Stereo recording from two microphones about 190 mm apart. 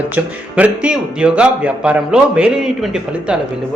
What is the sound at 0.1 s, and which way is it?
A man's voice, 5° right (ahead or behind).